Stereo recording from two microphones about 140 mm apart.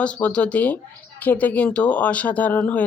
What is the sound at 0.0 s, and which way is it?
Speech, 10° left (ahead or behind).